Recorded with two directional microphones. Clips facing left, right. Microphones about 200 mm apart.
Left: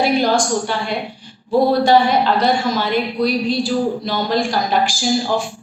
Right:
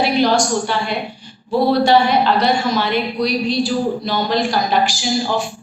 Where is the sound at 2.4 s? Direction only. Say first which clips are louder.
Even; 45° left (ahead or behind).